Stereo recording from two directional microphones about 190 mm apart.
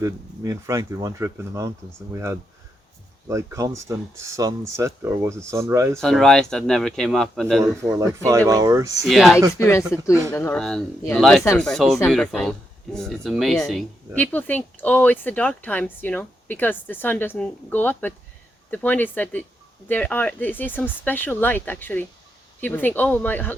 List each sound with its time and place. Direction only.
0.0 s speech: 15° right (ahead or behind)
6.0 s speech: centre (ahead or behind)
7.6 s speech: 15° right (ahead or behind)
9.0 s speech: centre (ahead or behind)